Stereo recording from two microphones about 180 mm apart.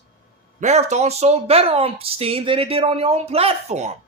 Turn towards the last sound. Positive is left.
turn(degrees=-40)  # may be behind; listen again after turning